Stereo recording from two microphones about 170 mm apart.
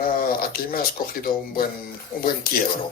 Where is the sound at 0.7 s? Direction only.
60° left (ahead or behind).